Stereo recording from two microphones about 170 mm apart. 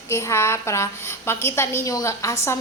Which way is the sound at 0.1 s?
15° left (ahead or behind).